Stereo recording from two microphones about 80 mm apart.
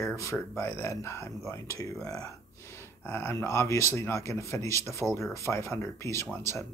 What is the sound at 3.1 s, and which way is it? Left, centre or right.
Speech, left.